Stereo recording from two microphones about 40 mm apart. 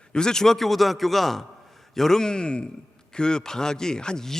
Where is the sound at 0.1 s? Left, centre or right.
Centre.